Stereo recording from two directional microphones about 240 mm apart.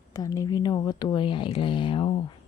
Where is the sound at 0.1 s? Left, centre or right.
Centre.